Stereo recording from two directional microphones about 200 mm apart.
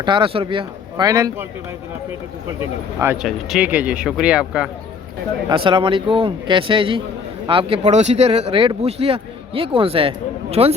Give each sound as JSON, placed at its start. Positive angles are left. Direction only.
{"t": 0.0, "sound": "a man's voice", "side_deg": -25}
{"t": 3.0, "sound": "speech", "side_deg": -10}
{"t": 5.5, "sound": "a man's voice", "side_deg": -25}